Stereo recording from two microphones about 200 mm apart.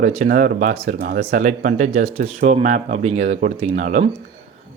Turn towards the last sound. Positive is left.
turn(degrees=-40)  # may be behind; listen again after turning